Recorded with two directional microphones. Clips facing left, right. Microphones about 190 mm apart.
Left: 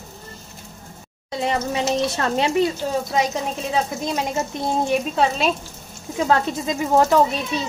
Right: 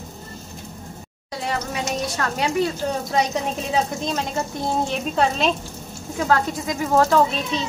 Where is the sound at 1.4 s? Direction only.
20° left (ahead or behind).